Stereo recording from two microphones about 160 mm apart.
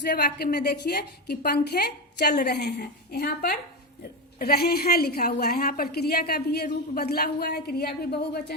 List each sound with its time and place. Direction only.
0.0 s a woman's voice: 85° left